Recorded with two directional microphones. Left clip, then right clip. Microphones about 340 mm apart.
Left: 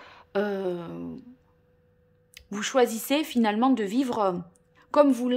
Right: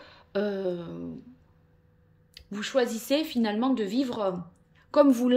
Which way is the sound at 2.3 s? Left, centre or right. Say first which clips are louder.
Left 3 dB; centre.